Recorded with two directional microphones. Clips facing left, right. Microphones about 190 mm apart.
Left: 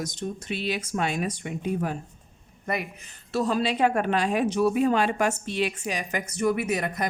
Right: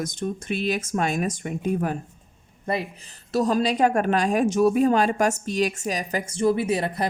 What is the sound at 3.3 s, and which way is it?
A woman's voice, 40° right (ahead or behind).